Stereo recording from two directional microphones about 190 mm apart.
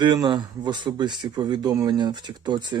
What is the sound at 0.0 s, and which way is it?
Speech, 25° right (ahead or behind).